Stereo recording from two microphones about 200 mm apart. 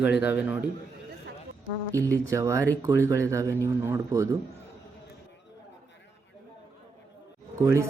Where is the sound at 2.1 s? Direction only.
15° right (ahead or behind).